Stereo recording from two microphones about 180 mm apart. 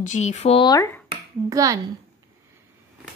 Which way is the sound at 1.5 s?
20° right (ahead or behind).